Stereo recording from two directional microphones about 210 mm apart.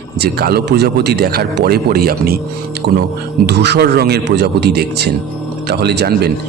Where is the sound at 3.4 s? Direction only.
55° right (ahead or behind).